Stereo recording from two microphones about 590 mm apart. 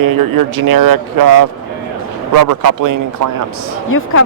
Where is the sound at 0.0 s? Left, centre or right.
Right.